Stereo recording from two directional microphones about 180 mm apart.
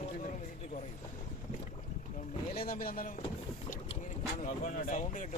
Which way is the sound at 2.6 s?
55° left (ahead or behind).